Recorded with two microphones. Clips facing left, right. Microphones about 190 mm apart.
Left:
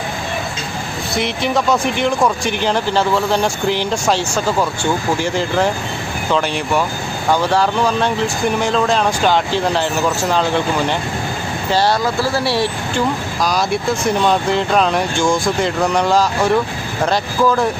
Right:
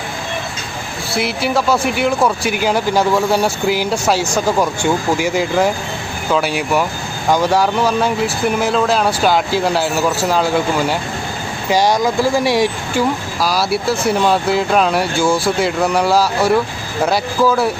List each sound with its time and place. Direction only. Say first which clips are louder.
1.1 s speech: right 1 dB; 5° right (ahead or behind)